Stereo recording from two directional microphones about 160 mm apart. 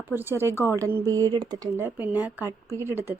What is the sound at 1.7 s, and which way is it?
Speech, 15° right (ahead or behind).